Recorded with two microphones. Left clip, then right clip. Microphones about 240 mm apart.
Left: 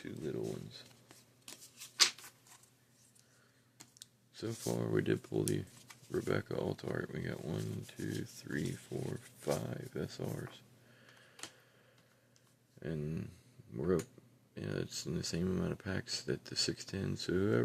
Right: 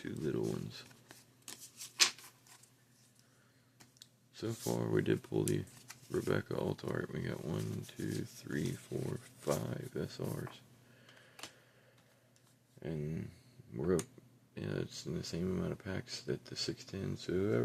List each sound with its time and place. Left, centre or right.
0.0 s speech: centre
0.4 s a sound: centre
4.0 s speech: centre
12.8 s speech: centre
14.5 s speech: centre